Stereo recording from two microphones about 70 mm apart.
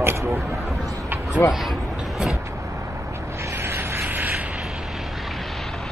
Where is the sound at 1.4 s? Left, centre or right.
Left.